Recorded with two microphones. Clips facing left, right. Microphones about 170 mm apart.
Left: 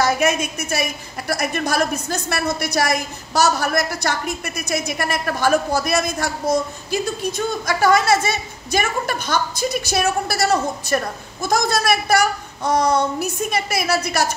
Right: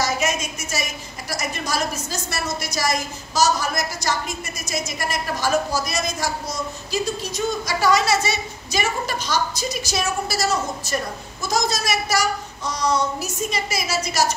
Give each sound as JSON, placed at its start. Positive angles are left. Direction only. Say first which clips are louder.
{"t": 0.0, "sound": "a woman's voice", "louder": "left 5 dB", "side_deg": 60}